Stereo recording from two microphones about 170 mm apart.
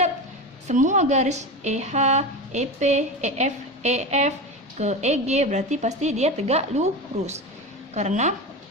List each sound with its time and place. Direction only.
0.7 s a woman's voice: 45° right (ahead or behind)
7.9 s speech: 45° right (ahead or behind)